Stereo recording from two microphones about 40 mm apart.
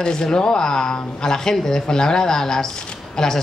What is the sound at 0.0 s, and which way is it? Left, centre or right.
A woman's voice, centre.